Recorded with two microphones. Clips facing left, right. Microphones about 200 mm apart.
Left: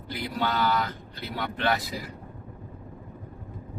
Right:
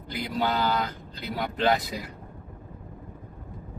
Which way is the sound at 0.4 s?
25° right (ahead or behind).